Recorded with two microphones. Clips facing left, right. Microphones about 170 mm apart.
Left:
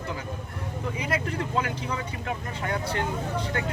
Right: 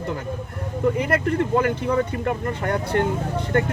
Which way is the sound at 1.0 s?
55° right (ahead or behind).